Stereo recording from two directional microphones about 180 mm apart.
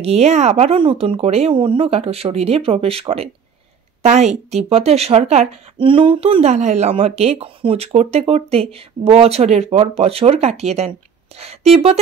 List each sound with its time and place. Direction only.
0.0 s speech: 35° right (ahead or behind)